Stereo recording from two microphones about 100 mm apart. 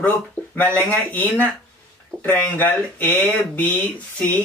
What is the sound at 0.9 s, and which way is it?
Speech, 15° left (ahead or behind).